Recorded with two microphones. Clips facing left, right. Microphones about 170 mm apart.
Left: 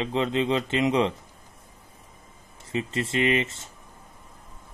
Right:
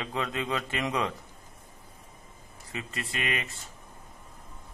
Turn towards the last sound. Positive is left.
turn(degrees=25)  # may be behind; listen again after turning